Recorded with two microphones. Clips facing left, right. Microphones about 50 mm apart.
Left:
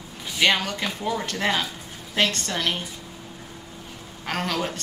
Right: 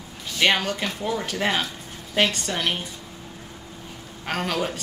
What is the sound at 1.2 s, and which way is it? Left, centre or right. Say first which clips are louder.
Speech: right 1 dB; centre.